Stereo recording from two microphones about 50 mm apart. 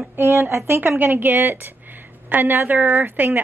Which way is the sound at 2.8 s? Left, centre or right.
Right.